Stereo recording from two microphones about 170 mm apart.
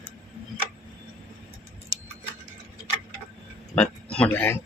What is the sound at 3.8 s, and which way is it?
Speech, 5° left (ahead or behind).